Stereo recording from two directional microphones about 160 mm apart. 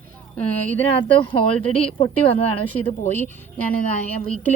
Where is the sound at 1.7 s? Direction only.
35° left (ahead or behind).